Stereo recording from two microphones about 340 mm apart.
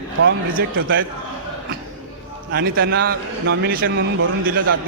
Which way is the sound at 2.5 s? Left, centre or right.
Right.